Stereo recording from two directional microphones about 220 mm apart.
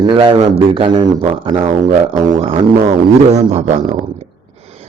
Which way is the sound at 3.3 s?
30° right (ahead or behind).